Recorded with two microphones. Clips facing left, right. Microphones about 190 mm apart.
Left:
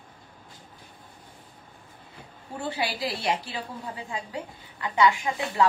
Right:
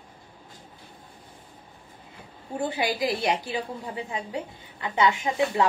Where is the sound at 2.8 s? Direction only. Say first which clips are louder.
Right 4 dB; 20° right (ahead or behind).